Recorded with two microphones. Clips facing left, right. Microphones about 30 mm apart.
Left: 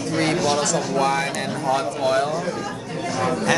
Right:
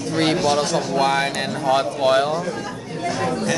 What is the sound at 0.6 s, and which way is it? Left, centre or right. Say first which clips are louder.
Speech: right 1 dB; right.